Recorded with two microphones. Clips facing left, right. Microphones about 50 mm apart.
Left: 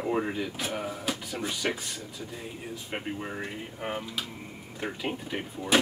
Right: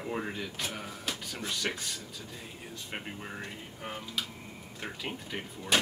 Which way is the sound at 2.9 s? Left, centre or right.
Centre.